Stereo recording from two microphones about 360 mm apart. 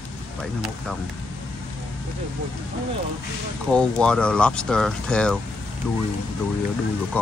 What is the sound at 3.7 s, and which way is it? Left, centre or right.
Speech, centre.